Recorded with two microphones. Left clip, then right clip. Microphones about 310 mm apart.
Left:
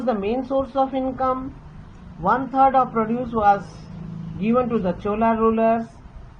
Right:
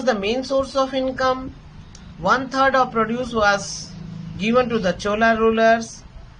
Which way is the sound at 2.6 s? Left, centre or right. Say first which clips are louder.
Left 2 dB; centre.